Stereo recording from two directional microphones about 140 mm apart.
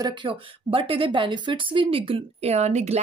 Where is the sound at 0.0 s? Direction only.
35° right (ahead or behind).